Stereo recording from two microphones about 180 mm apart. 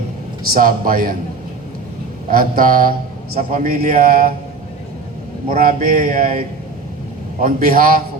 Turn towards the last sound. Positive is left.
turn(degrees=-50)  # may be behind; listen again after turning